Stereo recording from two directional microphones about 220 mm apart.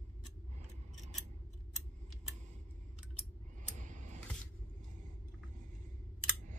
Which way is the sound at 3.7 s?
35° right (ahead or behind).